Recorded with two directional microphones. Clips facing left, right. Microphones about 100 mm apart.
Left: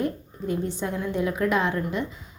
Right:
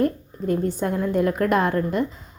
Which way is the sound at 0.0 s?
50° right (ahead or behind).